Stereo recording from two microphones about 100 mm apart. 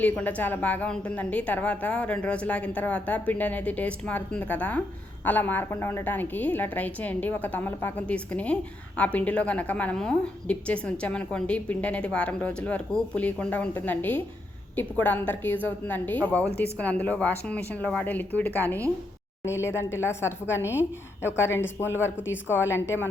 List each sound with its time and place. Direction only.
0.0 s a woman's voice: 15° left (ahead or behind)